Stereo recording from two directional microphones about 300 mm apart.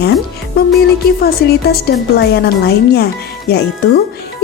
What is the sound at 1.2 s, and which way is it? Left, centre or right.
Speech, left.